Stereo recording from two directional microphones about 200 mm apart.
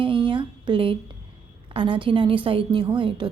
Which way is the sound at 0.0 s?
25° right (ahead or behind).